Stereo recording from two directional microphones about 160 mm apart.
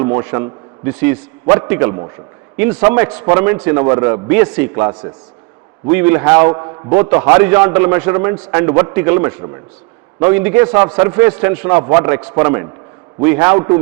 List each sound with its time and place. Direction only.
0.0 s a man's voice: 20° right (ahead or behind)
4.7 s a man's voice: 25° right (ahead or behind)
5.9 s a man's voice: 15° right (ahead or behind)
6.5 s a man's voice: 25° right (ahead or behind)